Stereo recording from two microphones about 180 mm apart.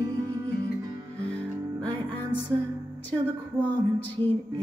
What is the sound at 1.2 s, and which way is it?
Music, 5° left (ahead or behind).